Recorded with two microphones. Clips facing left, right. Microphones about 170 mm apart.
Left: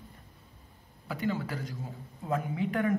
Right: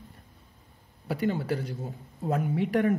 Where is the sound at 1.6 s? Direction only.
65° right (ahead or behind).